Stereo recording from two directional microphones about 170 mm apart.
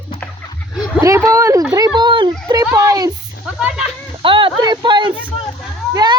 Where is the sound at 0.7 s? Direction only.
Centre (ahead or behind).